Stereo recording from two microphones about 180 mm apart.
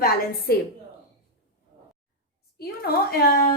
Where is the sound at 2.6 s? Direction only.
60° left (ahead or behind).